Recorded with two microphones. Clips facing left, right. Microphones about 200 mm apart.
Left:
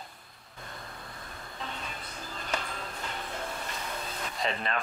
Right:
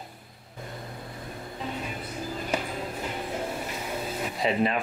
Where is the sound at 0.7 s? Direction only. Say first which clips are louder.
Right 5 dB; 15° right (ahead or behind).